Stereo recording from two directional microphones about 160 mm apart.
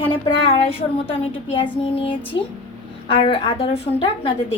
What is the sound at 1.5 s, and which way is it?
A woman's voice, 35° left (ahead or behind).